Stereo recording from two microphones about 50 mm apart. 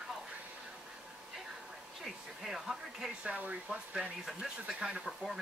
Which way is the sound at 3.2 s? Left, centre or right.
Right.